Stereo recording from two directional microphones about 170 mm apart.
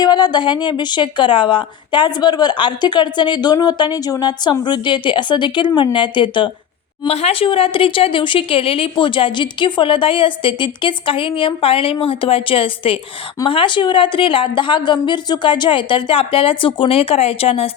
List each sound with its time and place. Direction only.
0.0 s a woman's voice: 25° left (ahead or behind)